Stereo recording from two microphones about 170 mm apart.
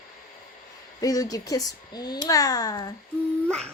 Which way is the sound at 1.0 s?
20° left (ahead or behind).